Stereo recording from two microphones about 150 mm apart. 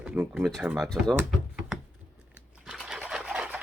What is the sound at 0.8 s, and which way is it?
Speech, 5° left (ahead or behind).